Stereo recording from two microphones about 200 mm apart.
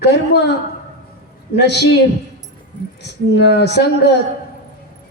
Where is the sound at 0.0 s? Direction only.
55° left (ahead or behind).